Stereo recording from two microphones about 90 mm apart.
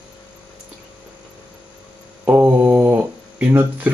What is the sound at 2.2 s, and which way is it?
Mantra, 25° right (ahead or behind).